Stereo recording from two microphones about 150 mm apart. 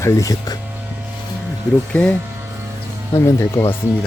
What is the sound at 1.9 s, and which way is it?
Speech, 10° left (ahead or behind).